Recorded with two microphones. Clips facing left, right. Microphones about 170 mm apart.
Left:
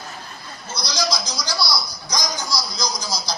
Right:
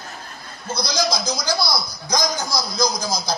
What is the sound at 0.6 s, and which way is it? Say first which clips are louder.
A man's voice: right 3 dB; 55° right (ahead or behind).